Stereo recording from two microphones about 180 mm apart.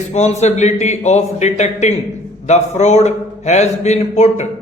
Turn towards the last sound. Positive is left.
turn(degrees=40)  # may be behind; listen again after turning